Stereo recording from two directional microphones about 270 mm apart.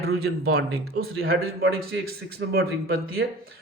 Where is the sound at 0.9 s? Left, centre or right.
Right.